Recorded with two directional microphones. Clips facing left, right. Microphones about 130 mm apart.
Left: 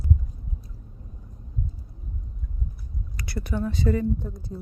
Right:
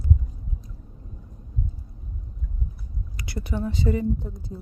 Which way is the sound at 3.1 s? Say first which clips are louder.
Left 1 dB; 20° right (ahead or behind).